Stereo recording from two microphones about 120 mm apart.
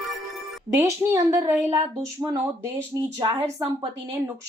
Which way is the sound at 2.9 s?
35° right (ahead or behind).